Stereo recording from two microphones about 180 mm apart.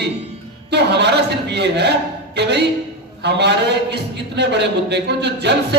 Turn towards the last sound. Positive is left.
turn(degrees=-70)  # may be behind; listen again after turning